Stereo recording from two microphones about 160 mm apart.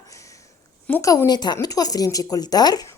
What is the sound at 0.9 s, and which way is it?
Speech, 20° left (ahead or behind).